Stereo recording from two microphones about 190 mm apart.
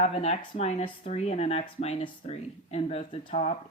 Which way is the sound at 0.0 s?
35° left (ahead or behind).